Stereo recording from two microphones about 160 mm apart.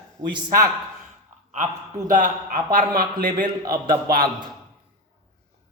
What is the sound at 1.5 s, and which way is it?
A man's voice, 50° right (ahead or behind).